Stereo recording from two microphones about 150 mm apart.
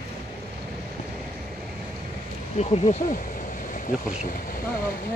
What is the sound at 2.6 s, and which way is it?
Speech, 45° left (ahead or behind).